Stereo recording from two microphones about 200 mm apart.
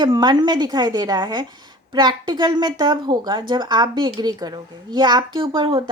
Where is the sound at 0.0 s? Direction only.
20° right (ahead or behind).